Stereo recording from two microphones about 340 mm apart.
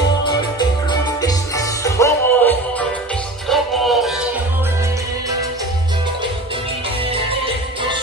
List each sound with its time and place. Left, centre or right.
0.3 s music: centre
7.1 s music: centre